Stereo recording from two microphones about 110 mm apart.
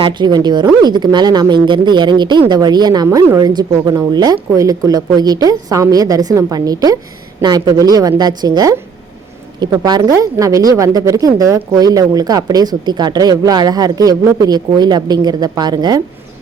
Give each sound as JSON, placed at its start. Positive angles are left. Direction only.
{"t": 0.0, "sound": "speech", "side_deg": -40}
{"t": 9.8, "sound": "speech", "side_deg": -35}